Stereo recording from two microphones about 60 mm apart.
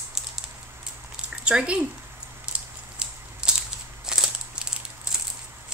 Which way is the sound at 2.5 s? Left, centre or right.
Centre.